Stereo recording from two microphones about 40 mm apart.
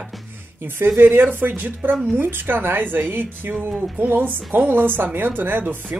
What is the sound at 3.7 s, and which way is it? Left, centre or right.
Speech, right.